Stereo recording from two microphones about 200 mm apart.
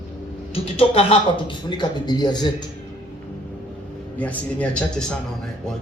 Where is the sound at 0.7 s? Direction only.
30° left (ahead or behind).